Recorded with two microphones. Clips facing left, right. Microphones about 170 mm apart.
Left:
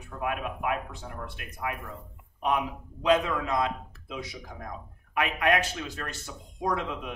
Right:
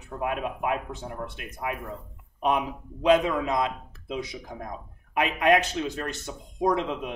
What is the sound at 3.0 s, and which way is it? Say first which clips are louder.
Speech: right 3 dB; 20° right (ahead or behind).